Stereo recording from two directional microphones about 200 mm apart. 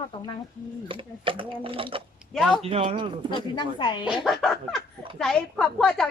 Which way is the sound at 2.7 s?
25° right (ahead or behind).